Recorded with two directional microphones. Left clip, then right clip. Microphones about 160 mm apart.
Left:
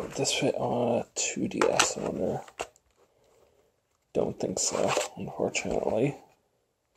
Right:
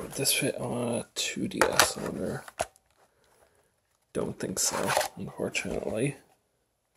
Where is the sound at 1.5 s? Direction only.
65° right (ahead or behind).